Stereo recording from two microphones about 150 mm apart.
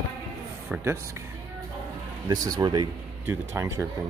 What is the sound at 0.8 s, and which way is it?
Speech, 15° right (ahead or behind).